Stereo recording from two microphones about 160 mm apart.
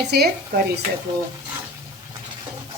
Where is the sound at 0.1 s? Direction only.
90° right.